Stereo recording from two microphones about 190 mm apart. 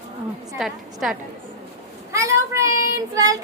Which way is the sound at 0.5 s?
Centre (ahead or behind).